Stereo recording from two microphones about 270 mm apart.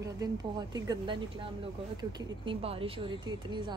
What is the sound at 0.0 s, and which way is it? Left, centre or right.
Speech, centre.